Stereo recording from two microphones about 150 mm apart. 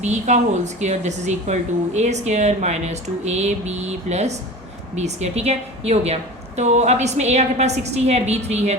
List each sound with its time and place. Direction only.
0.0 s speech: 50° right (ahead or behind)